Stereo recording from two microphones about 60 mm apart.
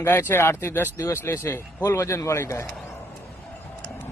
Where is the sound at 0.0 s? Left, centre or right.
Left.